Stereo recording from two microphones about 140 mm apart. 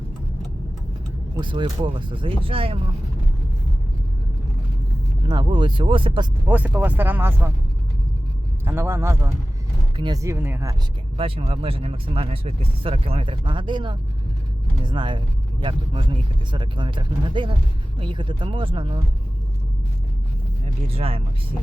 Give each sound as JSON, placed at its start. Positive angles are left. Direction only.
{"t": 1.4, "sound": "speech", "side_deg": -35}
{"t": 5.3, "sound": "speech", "side_deg": -35}
{"t": 6.5, "sound": "speech", "side_deg": -10}
{"t": 8.6, "sound": "speech", "side_deg": -15}
{"t": 11.2, "sound": "speech", "side_deg": -40}
{"t": 20.7, "sound": "speech", "side_deg": -45}